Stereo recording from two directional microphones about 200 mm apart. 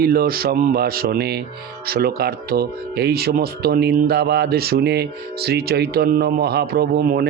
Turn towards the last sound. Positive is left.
turn(degrees=-50)  # may be behind; listen again after turning